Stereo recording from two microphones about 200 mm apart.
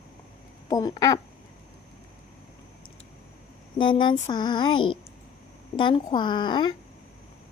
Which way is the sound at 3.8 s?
25° left (ahead or behind).